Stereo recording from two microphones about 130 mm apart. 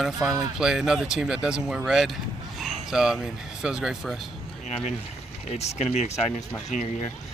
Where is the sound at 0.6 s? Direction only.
5° right (ahead or behind).